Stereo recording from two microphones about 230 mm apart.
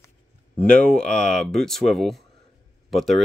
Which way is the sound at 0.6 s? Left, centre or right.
Centre.